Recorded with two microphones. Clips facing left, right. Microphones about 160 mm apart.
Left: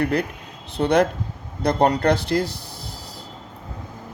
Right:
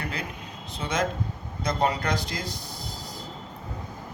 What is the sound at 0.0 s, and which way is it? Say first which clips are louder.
Speech: left 11 dB; 60° left (ahead or behind).